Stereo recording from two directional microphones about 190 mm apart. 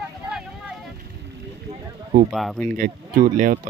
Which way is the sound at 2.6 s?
45° right (ahead or behind).